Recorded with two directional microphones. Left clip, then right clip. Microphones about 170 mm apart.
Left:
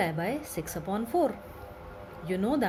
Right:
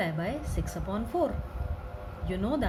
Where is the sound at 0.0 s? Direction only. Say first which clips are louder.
Left 2 dB; 50° left (ahead or behind).